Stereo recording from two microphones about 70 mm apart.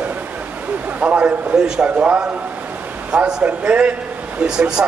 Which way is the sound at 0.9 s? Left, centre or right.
Right.